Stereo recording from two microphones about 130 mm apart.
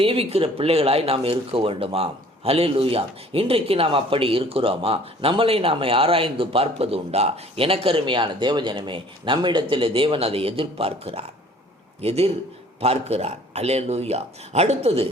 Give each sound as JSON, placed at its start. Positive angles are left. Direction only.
{"t": 0.0, "sound": "speech", "side_deg": -45}